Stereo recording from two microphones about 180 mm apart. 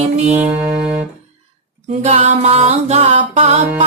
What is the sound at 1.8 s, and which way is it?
Music, 40° right (ahead or behind).